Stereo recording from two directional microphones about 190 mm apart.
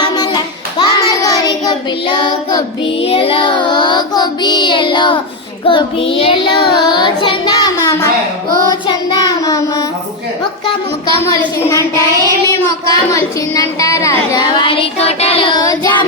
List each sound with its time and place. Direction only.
0.0 s child singing: 25° left (ahead or behind)
11.6 s child singing: 15° left (ahead or behind)